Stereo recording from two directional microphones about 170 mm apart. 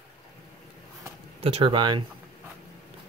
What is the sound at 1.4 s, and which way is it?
Speech, 35° right (ahead or behind).